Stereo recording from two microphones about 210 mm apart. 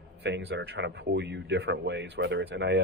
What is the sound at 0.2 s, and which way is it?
A man's voice, 55° right (ahead or behind).